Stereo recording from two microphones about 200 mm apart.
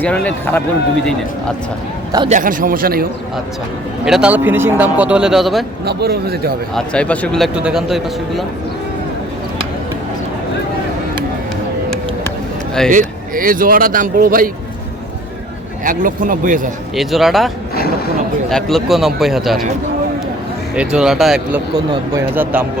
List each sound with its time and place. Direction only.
0.0 s speech: 5° left (ahead or behind)
2.3 s speech: 40° right (ahead or behind)
4.0 s speech: 5° right (ahead or behind)
5.8 s speech: 50° right (ahead or behind)
6.7 s speech: 5° left (ahead or behind)
12.9 s speech: 40° right (ahead or behind)
15.8 s a man's voice: 40° right (ahead or behind)
16.9 s speech: centre (ahead or behind)
17.7 s speech: 50° left (ahead or behind)
18.5 s speech: centre (ahead or behind)
20.7 s speech: 5° right (ahead or behind)